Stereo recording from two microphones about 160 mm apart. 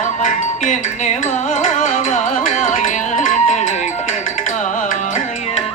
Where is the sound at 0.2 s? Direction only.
50° left (ahead or behind).